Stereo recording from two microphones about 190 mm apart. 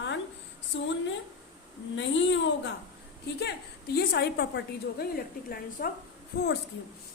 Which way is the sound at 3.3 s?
60° left (ahead or behind).